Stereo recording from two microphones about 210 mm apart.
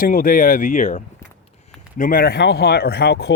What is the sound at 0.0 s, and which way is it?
Speech, 40° left (ahead or behind).